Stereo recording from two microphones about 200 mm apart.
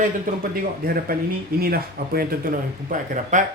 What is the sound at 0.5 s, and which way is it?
Speech, 45° right (ahead or behind).